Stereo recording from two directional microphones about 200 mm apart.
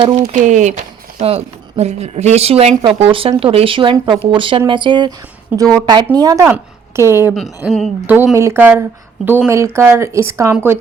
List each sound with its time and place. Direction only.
0.0 s a woman's voice: 30° right (ahead or behind); by 7.3 s 15° right (ahead or behind)
7.3 s a woman's voice: centre (ahead or behind)